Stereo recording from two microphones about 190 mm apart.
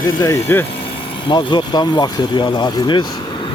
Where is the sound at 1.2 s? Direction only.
25° left (ahead or behind).